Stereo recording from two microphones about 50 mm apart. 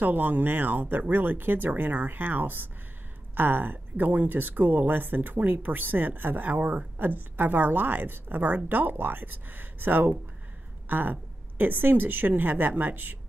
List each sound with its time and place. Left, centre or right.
0.0 s speech: right